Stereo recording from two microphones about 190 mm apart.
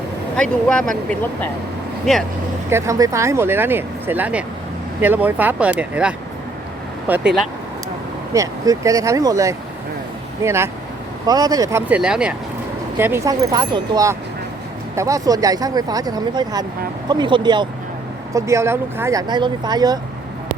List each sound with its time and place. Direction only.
0.3 s speech: 5° left (ahead or behind)
2.1 s speech: centre (ahead or behind)
2.6 s speech: 15° right (ahead or behind)
8.3 s speech: 15° right (ahead or behind)